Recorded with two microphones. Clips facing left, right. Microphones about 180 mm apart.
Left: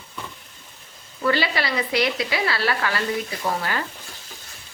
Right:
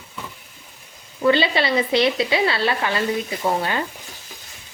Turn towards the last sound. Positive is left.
turn(degrees=-25)  # may be behind; listen again after turning